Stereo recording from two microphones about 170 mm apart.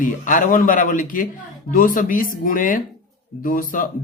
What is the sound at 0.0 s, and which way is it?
Speech, 50° left (ahead or behind).